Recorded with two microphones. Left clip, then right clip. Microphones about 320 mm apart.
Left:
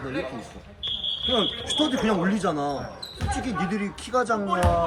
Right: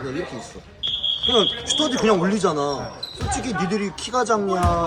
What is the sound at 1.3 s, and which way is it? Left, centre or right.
Speech, centre.